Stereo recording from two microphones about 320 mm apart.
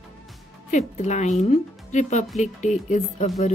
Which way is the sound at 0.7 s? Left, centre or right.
Left.